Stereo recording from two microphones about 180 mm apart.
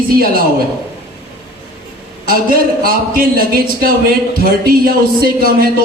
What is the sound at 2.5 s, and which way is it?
Speech, 55° right (ahead or behind).